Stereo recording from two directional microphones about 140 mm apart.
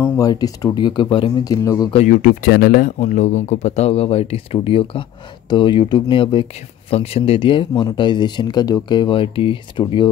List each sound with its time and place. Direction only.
0.0 s speech: 25° left (ahead or behind)
1.4 s speech: 25° left (ahead or behind)
2.0 s speech: 90° left
3.0 s speech: 60° left (ahead or behind); by 10.0 s 35° left (ahead or behind)